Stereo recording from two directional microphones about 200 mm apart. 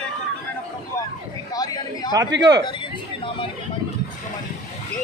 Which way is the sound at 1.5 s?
20° left (ahead or behind).